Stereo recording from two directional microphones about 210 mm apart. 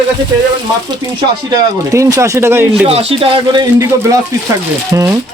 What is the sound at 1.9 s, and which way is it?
Speech, 15° right (ahead or behind).